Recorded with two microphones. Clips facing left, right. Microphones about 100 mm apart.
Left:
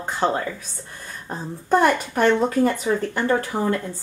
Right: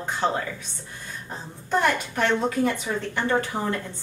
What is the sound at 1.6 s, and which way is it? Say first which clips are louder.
Speech: left 5 dB; 45° left (ahead or behind).